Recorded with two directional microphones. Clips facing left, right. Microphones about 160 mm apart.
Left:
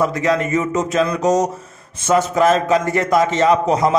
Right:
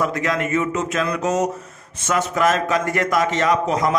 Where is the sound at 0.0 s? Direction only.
35° left (ahead or behind).